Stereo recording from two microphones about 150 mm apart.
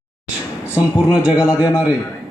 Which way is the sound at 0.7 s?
5° right (ahead or behind).